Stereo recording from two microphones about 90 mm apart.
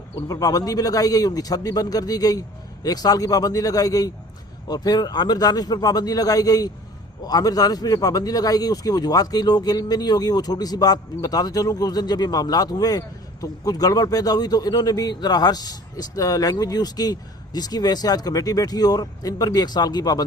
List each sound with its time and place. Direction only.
0.2 s a man's voice: 45° left (ahead or behind)